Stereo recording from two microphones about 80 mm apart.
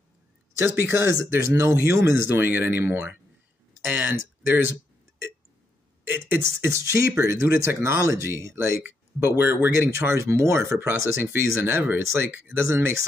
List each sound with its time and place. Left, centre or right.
0.6 s speech: right
6.0 s speech: right
6.7 s speech: right